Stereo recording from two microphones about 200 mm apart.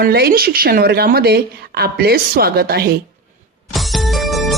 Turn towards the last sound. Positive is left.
turn(degrees=0)  # may be behind; listen again after turning